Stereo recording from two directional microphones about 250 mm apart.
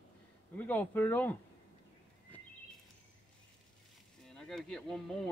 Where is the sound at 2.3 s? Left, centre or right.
Centre.